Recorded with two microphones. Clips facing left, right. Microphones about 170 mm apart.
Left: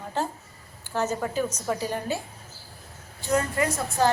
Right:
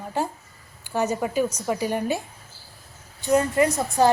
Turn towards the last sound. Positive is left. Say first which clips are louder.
# right 4 dB
turn(degrees=-20)  # may be behind; listen again after turning